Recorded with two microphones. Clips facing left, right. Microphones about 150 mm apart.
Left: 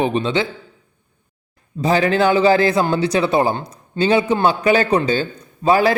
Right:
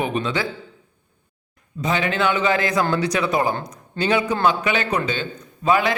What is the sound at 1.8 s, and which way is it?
A man's voice, 35° left (ahead or behind).